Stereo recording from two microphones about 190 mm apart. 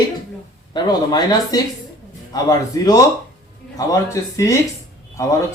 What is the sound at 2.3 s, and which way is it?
A man's voice, 20° left (ahead or behind).